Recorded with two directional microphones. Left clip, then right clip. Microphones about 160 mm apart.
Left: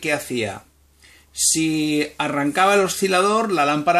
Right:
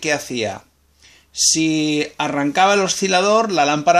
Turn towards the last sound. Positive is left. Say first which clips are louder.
# right 3 dB
turn(degrees=-35)  # may be behind; listen again after turning